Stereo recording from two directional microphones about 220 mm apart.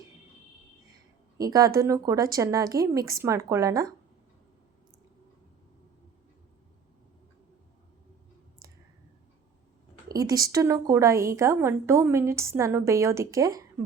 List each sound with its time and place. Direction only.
1.4 s a woman's voice: 15° right (ahead or behind)
10.1 s a woman's voice: 15° right (ahead or behind)